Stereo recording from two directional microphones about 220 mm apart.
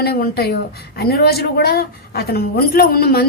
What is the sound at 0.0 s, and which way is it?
A woman's voice, 45° left (ahead or behind).